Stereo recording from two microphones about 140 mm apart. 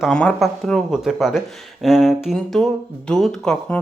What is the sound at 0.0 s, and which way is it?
Speech, 5° left (ahead or behind).